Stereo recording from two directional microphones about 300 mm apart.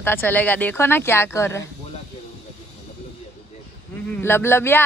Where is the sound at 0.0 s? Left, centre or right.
Centre.